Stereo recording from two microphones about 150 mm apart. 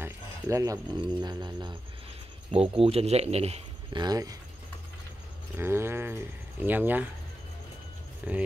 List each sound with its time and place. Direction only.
0.0 s a sound: 20° right (ahead or behind)
1.0 s music: 30° right (ahead or behind)
2.5 s speech: 40° right (ahead or behind)
3.9 s music: 25° right (ahead or behind)
5.6 s speech: 15° right (ahead or behind)
8.2 s speech: 10° right (ahead or behind)